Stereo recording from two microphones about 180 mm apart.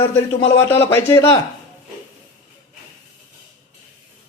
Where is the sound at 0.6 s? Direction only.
15° left (ahead or behind).